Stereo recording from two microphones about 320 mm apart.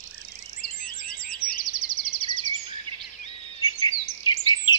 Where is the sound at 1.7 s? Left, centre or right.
Left.